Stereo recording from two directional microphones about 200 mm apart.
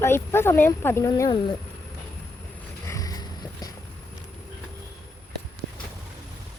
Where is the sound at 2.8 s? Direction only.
15° left (ahead or behind).